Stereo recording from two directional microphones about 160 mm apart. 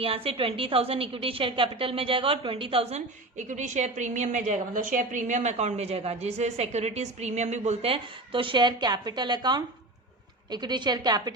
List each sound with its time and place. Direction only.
0.0 s a woman's voice: 35° right (ahead or behind)